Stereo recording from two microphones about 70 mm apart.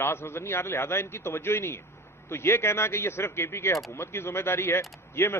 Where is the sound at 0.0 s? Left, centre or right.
Left.